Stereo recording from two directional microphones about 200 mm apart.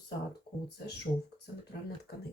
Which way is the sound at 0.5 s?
25° left (ahead or behind).